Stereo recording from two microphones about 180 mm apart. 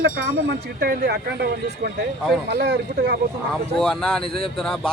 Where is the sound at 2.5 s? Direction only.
70° right (ahead or behind).